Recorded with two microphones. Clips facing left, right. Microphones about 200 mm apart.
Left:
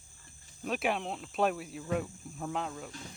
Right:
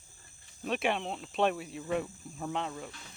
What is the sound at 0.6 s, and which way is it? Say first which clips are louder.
Speech: right 1 dB; centre (ahead or behind).